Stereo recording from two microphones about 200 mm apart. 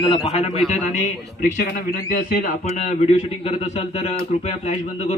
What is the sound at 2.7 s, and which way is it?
Speech, 35° left (ahead or behind).